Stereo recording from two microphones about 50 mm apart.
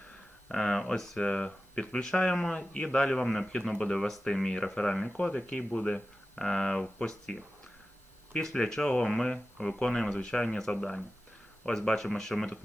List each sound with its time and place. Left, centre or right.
0.4 s speech: centre
11.8 s speech: centre